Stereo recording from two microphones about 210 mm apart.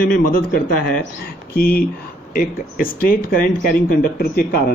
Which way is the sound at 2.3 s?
45° left (ahead or behind).